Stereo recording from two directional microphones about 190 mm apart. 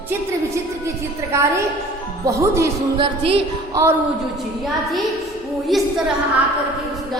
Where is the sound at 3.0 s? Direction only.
30° right (ahead or behind).